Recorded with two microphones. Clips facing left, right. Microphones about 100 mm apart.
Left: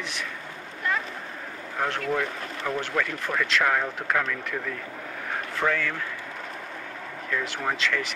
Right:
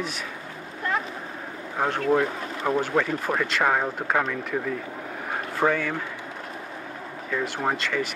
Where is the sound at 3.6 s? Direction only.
15° right (ahead or behind).